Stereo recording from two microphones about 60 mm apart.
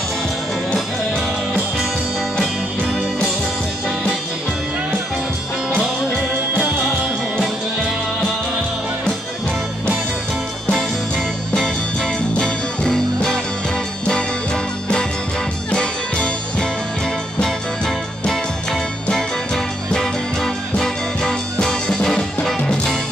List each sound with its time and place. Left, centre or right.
10.7 s music: centre